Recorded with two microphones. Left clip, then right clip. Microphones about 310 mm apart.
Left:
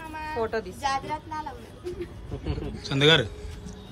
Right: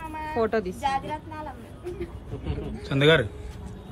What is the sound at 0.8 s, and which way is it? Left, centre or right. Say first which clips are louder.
Speech: right 1 dB; centre.